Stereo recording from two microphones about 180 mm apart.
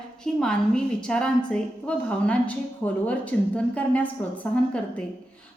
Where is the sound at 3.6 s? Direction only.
10° left (ahead or behind).